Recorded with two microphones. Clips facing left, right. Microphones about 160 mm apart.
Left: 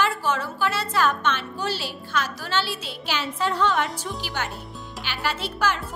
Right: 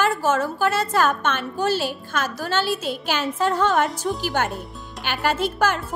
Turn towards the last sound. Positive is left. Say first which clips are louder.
# right 5 dB
turn(degrees=-50)  # may be behind; listen again after turning